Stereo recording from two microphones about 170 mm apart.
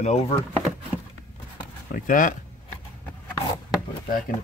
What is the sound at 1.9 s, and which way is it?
Speech, 50° left (ahead or behind).